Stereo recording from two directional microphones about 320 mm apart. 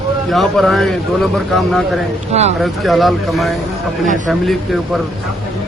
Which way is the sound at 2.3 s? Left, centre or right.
Centre.